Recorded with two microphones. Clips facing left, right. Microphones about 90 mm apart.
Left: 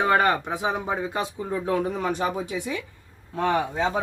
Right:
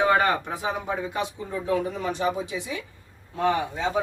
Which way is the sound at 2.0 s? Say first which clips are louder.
Even; 50° left (ahead or behind).